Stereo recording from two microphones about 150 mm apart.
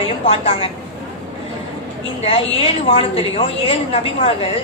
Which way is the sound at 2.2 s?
40° left (ahead or behind).